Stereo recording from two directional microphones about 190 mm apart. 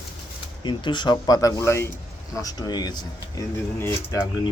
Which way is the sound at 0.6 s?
25° left (ahead or behind).